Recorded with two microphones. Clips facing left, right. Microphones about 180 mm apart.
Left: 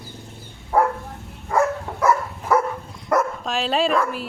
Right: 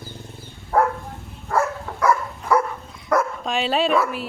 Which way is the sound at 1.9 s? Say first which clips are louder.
Right 1 dB; 5° left (ahead or behind).